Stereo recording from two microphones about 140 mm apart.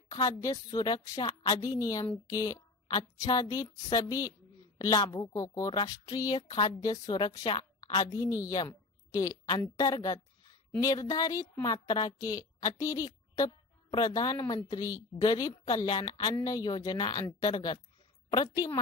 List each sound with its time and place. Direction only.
0.1 s a woman's voice: 25° left (ahead or behind)